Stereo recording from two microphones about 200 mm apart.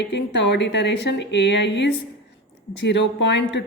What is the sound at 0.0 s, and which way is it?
A woman's voice, 60° left (ahead or behind).